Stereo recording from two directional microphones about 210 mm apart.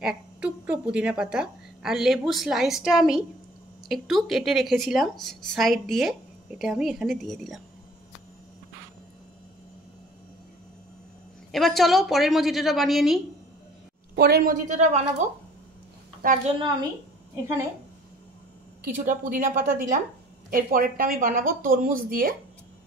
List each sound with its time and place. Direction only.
0.0 s a woman's voice: 5° right (ahead or behind)
11.5 s a woman's voice: centre (ahead or behind)
14.1 s a woman's voice: 50° right (ahead or behind)
18.9 s a woman's voice: 40° right (ahead or behind)